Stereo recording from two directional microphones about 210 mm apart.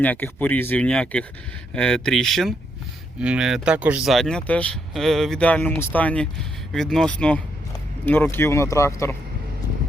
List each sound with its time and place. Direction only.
0.0 s speech: 10° left (ahead or behind)